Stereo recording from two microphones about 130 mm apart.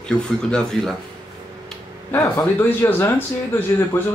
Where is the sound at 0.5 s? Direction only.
5° left (ahead or behind).